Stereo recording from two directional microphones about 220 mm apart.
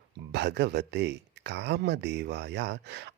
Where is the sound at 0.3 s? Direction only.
50° right (ahead or behind).